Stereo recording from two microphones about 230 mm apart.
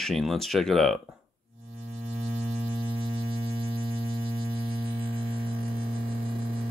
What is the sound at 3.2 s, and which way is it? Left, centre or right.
Mains hum, right.